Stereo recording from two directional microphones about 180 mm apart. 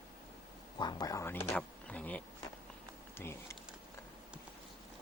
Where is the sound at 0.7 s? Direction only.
20° left (ahead or behind).